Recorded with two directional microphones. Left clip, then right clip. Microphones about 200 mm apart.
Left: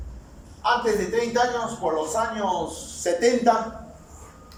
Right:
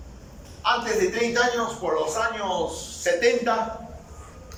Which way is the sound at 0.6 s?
40° left (ahead or behind).